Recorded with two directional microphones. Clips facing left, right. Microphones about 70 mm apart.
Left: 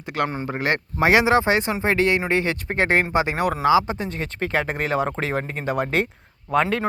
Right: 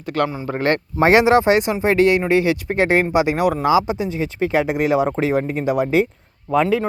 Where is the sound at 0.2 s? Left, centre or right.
Centre.